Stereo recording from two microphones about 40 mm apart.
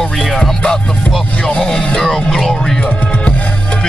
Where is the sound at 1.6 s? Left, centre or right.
Centre.